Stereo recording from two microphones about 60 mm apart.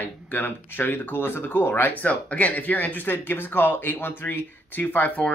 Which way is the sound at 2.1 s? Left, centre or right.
Left.